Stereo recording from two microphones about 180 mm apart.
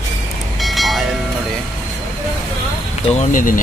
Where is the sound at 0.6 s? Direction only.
Centre (ahead or behind).